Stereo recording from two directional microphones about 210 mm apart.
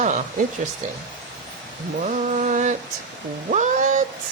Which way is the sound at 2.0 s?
35° right (ahead or behind).